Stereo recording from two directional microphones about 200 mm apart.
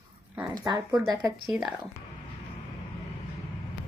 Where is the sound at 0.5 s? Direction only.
20° right (ahead or behind).